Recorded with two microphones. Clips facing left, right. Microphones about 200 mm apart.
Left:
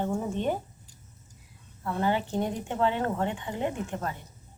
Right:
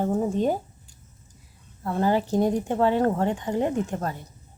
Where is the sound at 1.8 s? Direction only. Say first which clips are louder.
Right 5 dB; 40° right (ahead or behind).